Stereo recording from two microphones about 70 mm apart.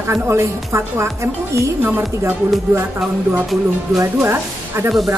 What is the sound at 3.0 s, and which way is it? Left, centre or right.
Speech, centre.